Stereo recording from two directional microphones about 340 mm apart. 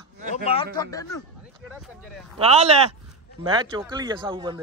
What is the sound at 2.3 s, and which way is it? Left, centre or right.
Speech, centre.